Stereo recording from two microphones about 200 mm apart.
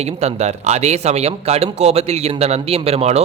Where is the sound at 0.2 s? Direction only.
35° right (ahead or behind).